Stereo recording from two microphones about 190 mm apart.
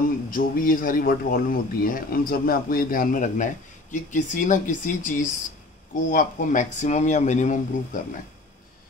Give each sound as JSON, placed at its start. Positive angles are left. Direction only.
{"t": 0.3, "sound": "speech", "side_deg": 45}